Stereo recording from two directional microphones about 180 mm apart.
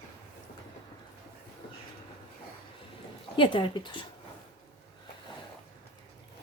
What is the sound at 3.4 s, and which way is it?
Speech, 30° left (ahead or behind).